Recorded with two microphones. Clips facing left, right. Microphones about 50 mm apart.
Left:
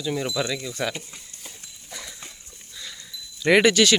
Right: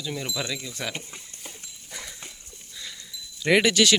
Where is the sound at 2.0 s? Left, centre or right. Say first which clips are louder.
Even; centre.